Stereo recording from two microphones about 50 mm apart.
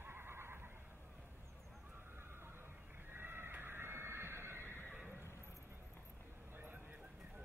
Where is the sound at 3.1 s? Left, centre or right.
Right.